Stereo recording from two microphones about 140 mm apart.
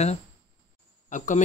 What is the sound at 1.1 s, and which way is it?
Speech, 65° left (ahead or behind).